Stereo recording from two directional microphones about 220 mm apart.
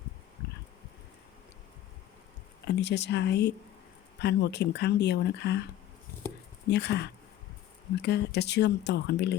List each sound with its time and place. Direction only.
2.6 s speech: 50° left (ahead or behind)
6.7 s speech: 50° left (ahead or behind)